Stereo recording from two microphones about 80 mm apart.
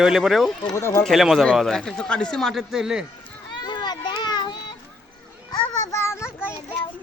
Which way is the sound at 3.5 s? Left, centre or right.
Left.